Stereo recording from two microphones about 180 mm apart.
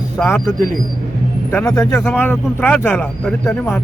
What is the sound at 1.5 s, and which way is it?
A man's voice, 15° left (ahead or behind).